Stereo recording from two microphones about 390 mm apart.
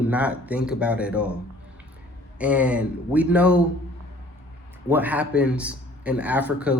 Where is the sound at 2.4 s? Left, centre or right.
Centre.